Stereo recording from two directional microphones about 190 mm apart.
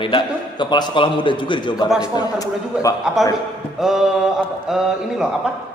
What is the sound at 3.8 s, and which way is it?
A woman's voice, centre (ahead or behind).